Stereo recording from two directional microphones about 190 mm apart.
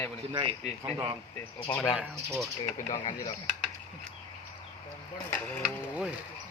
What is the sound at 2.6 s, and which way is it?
Speech, 35° left (ahead or behind).